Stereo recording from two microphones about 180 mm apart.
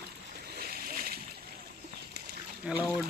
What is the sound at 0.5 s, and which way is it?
Boat, 55° right (ahead or behind).